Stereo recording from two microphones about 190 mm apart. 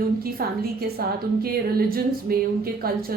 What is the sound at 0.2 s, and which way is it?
A woman's voice, 55° right (ahead or behind).